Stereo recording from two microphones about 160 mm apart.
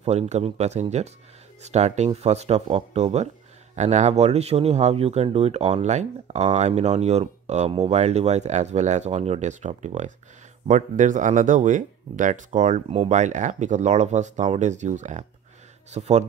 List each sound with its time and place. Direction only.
0.0 s speech: 45° right (ahead or behind)